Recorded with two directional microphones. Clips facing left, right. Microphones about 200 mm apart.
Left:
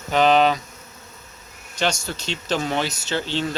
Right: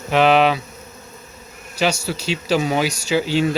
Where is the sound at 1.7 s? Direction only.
10° right (ahead or behind).